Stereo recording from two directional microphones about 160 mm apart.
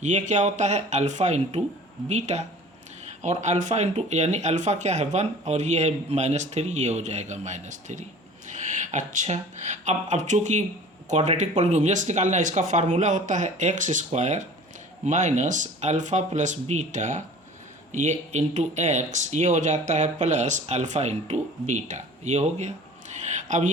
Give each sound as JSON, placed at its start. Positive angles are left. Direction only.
{"t": 0.0, "sound": "speech", "side_deg": -50}